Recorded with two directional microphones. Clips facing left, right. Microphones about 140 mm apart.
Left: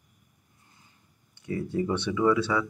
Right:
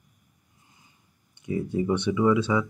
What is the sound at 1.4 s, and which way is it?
Speech, 15° right (ahead or behind).